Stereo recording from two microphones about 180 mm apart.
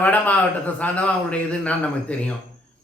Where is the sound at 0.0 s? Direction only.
10° left (ahead or behind).